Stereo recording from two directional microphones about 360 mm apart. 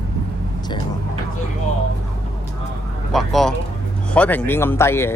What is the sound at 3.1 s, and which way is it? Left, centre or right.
Speech, centre.